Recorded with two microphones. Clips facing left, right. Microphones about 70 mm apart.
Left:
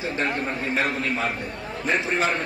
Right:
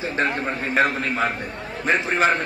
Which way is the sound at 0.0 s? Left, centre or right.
Right.